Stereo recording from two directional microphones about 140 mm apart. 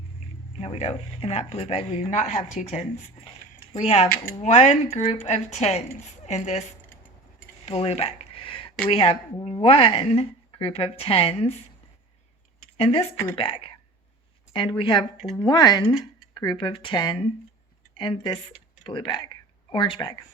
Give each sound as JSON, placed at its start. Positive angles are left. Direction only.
{"t": 0.6, "sound": "speech", "side_deg": 45}
{"t": 2.1, "sound": "a woman's voice", "side_deg": 55}
{"t": 7.6, "sound": "a sound", "side_deg": 45}
{"t": 8.9, "sound": "a woman's voice", "side_deg": 40}
{"t": 12.7, "sound": "a woman's voice", "side_deg": 45}